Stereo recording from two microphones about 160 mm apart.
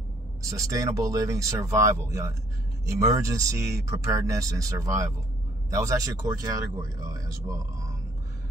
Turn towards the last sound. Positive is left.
turn(degrees=-20)  # may be behind; listen again after turning